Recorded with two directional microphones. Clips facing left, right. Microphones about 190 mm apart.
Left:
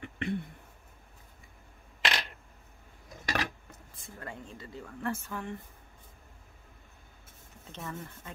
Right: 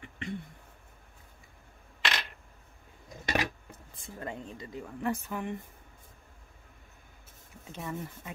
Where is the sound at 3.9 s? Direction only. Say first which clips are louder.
Right 4 dB; 25° right (ahead or behind).